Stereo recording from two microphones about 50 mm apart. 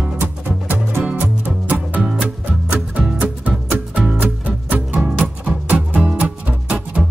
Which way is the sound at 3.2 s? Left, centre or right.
Right.